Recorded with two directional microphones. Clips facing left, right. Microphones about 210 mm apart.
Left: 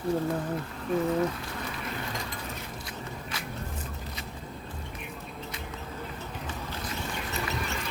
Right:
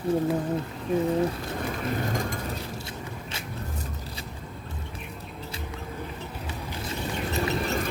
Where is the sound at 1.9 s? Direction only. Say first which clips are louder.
Right 7 dB; 45° right (ahead or behind).